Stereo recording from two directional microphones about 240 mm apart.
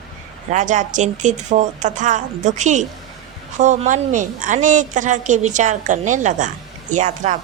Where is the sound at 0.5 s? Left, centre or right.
Right.